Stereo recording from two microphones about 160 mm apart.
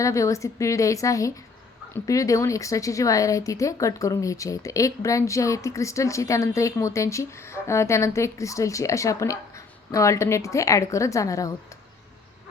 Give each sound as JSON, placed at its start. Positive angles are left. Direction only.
{"t": 0.0, "sound": "speech", "side_deg": 20}